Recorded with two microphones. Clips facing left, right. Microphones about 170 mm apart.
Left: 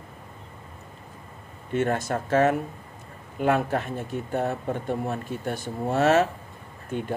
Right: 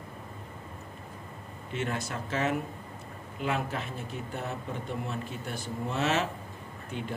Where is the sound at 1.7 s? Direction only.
50° left (ahead or behind).